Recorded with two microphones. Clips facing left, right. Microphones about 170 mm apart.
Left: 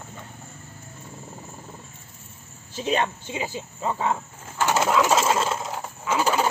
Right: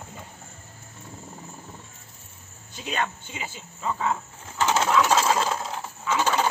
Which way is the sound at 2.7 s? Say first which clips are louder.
Left 5 dB; 30° left (ahead or behind).